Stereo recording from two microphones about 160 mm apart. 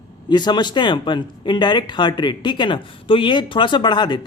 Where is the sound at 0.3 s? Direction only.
25° left (ahead or behind).